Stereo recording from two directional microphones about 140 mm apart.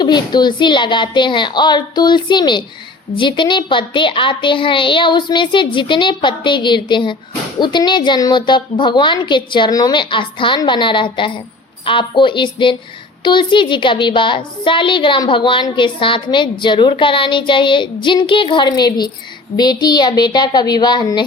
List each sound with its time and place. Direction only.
0.0 s a woman's voice: 30° left (ahead or behind)